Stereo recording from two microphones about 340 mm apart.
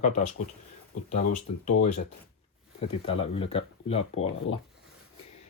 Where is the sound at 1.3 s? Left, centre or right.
Left.